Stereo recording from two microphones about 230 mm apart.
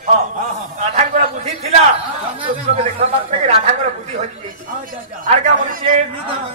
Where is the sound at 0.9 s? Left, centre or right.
Right.